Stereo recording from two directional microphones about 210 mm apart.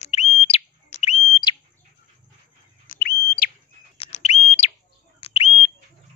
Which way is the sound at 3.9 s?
30° left (ahead or behind).